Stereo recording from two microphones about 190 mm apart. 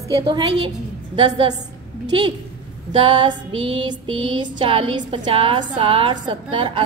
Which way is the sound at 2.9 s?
25° right (ahead or behind).